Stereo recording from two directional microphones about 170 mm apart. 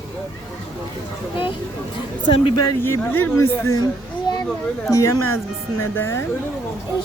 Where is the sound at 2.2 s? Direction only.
30° left (ahead or behind).